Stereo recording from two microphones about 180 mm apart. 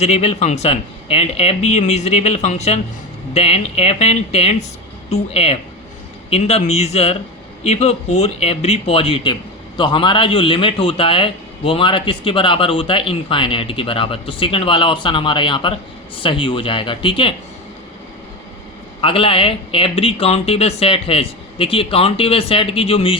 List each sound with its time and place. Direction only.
0.0 s speech: 35° left (ahead or behind)
19.0 s speech: 30° left (ahead or behind)